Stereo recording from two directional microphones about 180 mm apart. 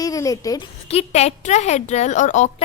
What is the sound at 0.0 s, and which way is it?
Speech, 20° left (ahead or behind).